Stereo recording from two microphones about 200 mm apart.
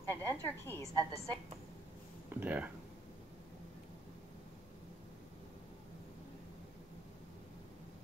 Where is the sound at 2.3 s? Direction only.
10° right (ahead or behind).